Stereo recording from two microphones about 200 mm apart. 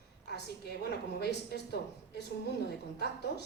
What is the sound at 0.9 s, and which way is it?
A woman's voice, 55° left (ahead or behind).